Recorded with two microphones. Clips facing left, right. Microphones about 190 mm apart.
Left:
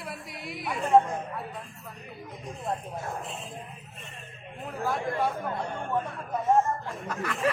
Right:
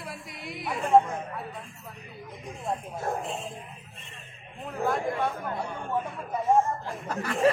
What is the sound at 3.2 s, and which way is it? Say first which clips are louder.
Speech: right 4 dB; centre (ahead or behind).